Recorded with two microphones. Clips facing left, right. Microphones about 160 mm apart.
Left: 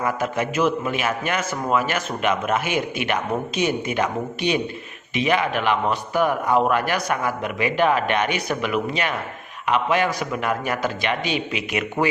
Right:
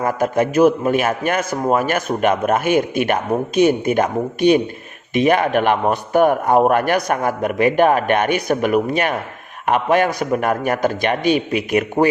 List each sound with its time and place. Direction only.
0.0 s a man's voice: 45° right (ahead or behind)